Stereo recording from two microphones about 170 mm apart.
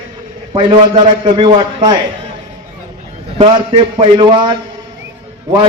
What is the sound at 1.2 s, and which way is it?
Speech, 30° right (ahead or behind).